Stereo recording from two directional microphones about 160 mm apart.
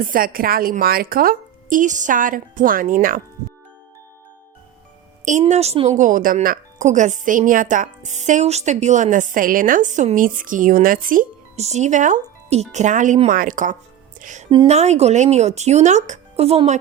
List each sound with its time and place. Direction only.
0.0 s a woman's voice: 60° right (ahead or behind)
5.2 s a woman's voice: 50° right (ahead or behind)
14.2 s music: 50° right (ahead or behind)
14.7 s speech: 45° right (ahead or behind)